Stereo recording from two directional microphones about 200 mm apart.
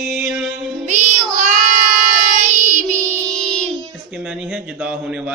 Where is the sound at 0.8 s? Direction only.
35° right (ahead or behind).